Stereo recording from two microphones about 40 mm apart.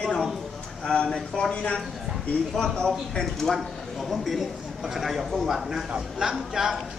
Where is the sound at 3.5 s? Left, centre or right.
Centre.